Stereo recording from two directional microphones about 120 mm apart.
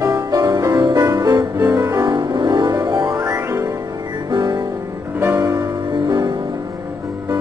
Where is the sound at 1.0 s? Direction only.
25° right (ahead or behind).